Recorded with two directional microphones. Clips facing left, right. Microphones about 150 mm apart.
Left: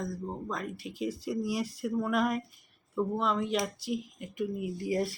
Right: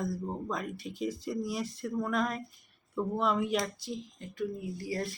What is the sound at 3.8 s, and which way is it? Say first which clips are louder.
Speech: left 5 dB; 15° left (ahead or behind).